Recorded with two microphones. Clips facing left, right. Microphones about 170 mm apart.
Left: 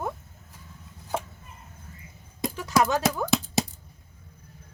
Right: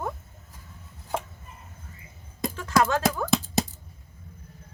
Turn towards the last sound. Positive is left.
turn(degrees=5)  # may be behind; listen again after turning